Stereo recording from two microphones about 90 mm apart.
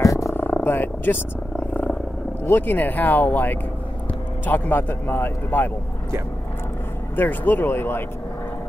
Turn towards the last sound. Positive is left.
turn(degrees=25)  # may be behind; listen again after turning